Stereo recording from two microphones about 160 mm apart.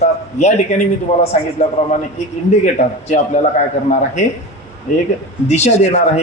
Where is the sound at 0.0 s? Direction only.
45° left (ahead or behind).